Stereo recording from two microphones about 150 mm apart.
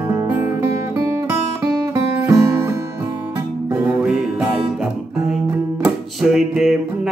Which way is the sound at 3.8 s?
5° right (ahead or behind).